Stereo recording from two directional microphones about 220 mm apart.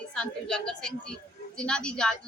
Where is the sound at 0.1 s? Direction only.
5° left (ahead or behind).